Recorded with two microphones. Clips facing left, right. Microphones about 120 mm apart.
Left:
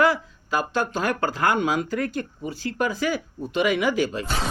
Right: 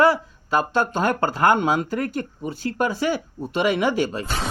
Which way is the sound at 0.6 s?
30° right (ahead or behind).